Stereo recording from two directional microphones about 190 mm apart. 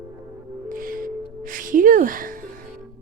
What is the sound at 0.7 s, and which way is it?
Music, 45° right (ahead or behind).